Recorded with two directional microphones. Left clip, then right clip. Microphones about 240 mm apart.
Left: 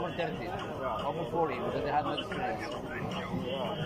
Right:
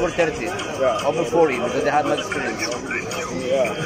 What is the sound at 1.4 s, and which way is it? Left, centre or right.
Speech, right.